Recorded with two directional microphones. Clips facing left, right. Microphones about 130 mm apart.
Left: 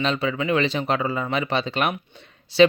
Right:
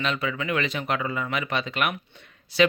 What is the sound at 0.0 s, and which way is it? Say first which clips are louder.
Speech: left 4 dB; 30° left (ahead or behind).